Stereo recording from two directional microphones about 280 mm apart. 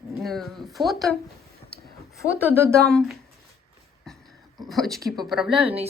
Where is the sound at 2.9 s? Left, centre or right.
Centre.